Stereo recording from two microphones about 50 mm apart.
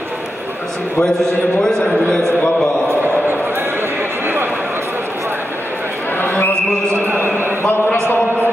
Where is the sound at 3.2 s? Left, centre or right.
Right.